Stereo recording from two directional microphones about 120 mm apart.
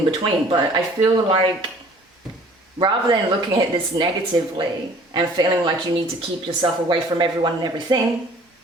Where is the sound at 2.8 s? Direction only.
40° right (ahead or behind).